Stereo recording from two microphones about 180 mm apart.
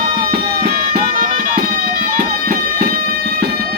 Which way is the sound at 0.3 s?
55° right (ahead or behind).